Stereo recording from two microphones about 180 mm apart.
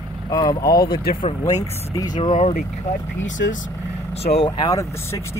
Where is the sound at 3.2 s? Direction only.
90° left.